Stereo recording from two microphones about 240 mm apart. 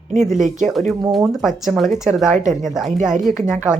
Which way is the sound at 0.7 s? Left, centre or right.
Centre.